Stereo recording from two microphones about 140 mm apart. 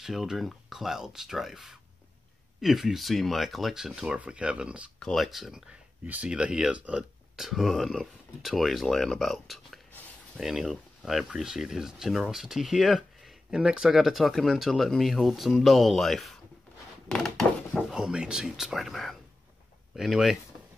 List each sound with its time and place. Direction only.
0.0 s speech: centre (ahead or behind)